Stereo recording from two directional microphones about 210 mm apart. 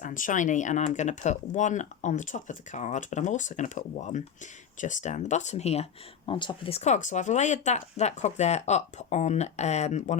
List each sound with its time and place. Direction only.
0.0 s speech: 40° left (ahead or behind)